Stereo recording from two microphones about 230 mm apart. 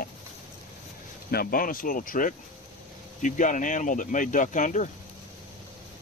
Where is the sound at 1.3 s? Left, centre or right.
Left.